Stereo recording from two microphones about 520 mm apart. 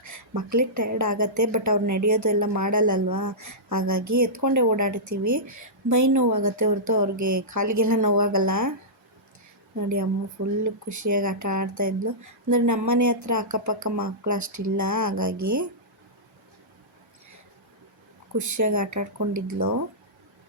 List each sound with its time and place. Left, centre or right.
0.0 s a woman's voice: right
10.6 s a woman's voice: right
18.3 s a woman's voice: right